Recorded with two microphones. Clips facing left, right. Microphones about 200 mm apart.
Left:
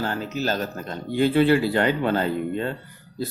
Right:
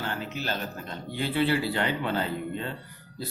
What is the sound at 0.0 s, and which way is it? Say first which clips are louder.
Speech: left 7 dB; 40° left (ahead or behind).